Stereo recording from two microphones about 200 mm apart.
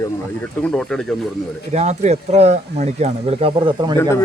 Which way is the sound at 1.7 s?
35° right (ahead or behind).